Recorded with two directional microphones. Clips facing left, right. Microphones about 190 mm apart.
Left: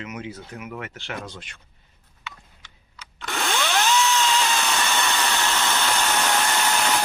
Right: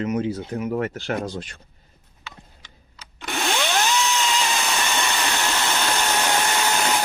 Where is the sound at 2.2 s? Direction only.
35° right (ahead or behind).